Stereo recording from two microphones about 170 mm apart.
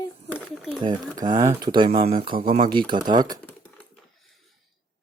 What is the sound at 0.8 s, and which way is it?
Speech, 20° right (ahead or behind).